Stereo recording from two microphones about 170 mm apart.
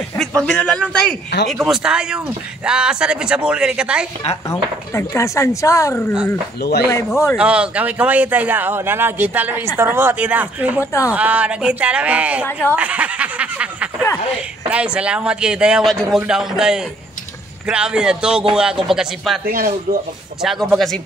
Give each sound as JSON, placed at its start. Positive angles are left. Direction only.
{"t": 0.2, "sound": "a man's voice", "side_deg": 5}
{"t": 4.5, "sound": "speech", "side_deg": 15}
{"t": 6.6, "sound": "speech", "side_deg": 75}
{"t": 7.3, "sound": "speech", "side_deg": -5}
{"t": 10.8, "sound": "speech", "side_deg": 15}
{"t": 11.1, "sound": "speech", "side_deg": -10}
{"t": 12.4, "sound": "speech", "side_deg": 15}
{"t": 12.7, "sound": "snicker", "side_deg": -10}
{"t": 14.7, "sound": "speech", "side_deg": -5}
{"t": 19.4, "sound": "speech", "side_deg": -60}
{"t": 20.4, "sound": "speech", "side_deg": 0}